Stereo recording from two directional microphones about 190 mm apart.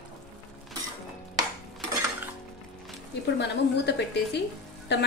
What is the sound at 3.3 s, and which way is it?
A woman's voice, 60° left (ahead or behind).